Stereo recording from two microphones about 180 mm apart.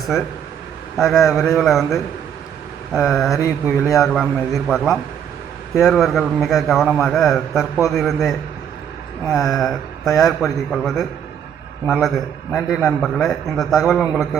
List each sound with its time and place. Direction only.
0.9 s a man's voice: centre (ahead or behind)
3.3 s speech: 15° left (ahead or behind)
4.0 s a man's voice: centre (ahead or behind)
9.4 s a man's voice: centre (ahead or behind)